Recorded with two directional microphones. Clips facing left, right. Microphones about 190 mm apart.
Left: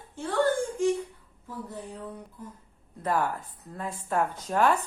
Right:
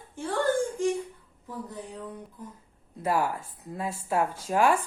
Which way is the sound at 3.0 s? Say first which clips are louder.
Right 1 dB; 10° right (ahead or behind).